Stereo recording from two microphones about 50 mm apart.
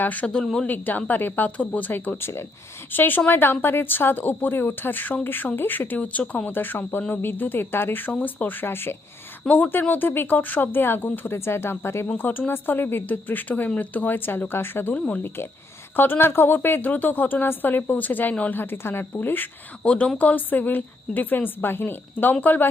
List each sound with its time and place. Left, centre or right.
0.0 s a woman's voice: left
0.4 s speech: centre
0.7 s a woman's voice: left
1.9 s a woman's voice: left
6.0 s speech: left
6.5 s a woman's voice: left
9.5 s a woman's voice: left
11.3 s speech: left
12.1 s a woman's voice: left
14.9 s speech: left
16.0 s a woman's voice: left
19.8 s a woman's voice: left